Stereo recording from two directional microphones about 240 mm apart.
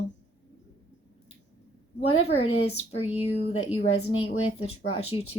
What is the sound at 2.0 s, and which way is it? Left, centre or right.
Speech, left.